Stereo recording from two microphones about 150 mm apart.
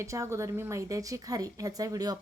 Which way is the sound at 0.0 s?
20° right (ahead or behind).